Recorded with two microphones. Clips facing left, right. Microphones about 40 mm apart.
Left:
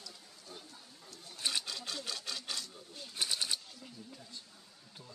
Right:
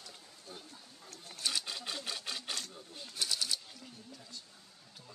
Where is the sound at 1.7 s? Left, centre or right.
Centre.